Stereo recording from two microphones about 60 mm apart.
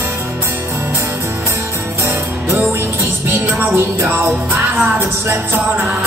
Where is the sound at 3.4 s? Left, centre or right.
Right.